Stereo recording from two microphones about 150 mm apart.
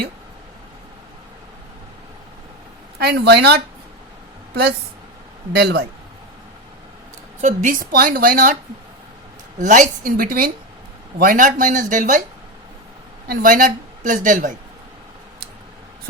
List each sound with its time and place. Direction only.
3.0 s speech: 90° right
5.5 s speech: 90° right
7.4 s a woman's voice: 60° right (ahead or behind)
9.6 s a woman's voice: 60° right (ahead or behind)
13.2 s a woman's voice: 70° right (ahead or behind)